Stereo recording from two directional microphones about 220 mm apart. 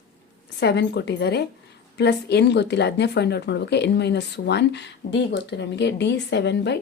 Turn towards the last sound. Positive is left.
turn(degrees=50)  # may be behind; listen again after turning